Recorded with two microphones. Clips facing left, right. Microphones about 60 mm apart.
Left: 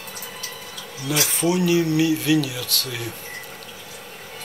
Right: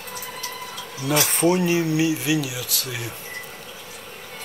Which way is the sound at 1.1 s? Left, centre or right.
Right.